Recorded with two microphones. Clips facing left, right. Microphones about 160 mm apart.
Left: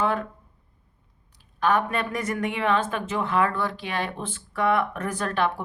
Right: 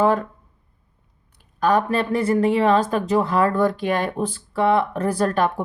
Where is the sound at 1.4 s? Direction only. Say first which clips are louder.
Right 4 dB; 40° right (ahead or behind).